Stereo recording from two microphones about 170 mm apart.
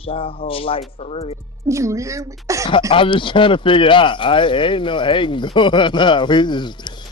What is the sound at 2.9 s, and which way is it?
Speech, 30° left (ahead or behind).